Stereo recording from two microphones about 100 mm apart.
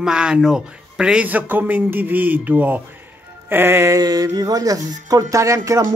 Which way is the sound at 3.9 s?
40° right (ahead or behind).